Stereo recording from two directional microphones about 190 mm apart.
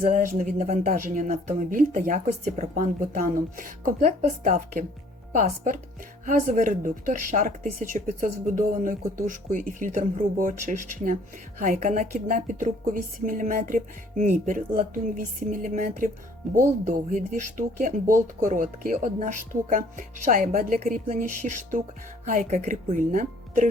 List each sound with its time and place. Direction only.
0.0 s speech: 45° right (ahead or behind)
6.2 s speech: 40° right (ahead or behind)
16.4 s speech: centre (ahead or behind)
16.8 s speech: 45° right (ahead or behind)